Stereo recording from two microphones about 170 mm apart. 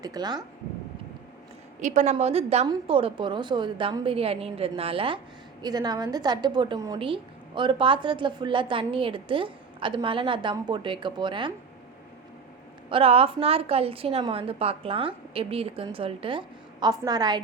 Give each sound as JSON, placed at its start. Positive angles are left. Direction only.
{"t": 0.0, "sound": "a woman's voice", "side_deg": -25}
{"t": 1.8, "sound": "a woman's voice", "side_deg": -45}
{"t": 12.9, "sound": "a woman's voice", "side_deg": -35}